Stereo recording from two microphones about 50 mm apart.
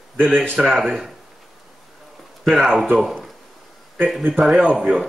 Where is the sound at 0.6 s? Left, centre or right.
Centre.